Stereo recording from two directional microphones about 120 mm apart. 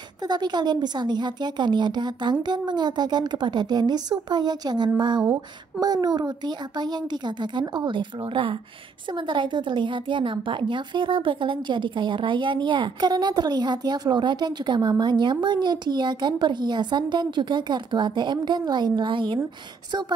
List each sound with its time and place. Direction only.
0.2 s a woman's voice: 35° right (ahead or behind)